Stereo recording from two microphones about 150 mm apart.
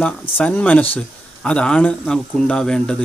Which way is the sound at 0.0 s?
10° left (ahead or behind).